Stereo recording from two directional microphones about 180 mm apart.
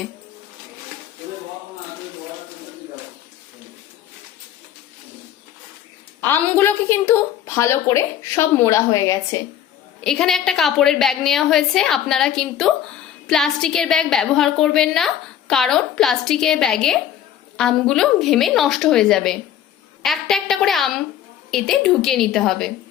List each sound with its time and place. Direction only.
6.2 s a woman's voice: 10° left (ahead or behind)
10.0 s a woman's voice: 5° left (ahead or behind)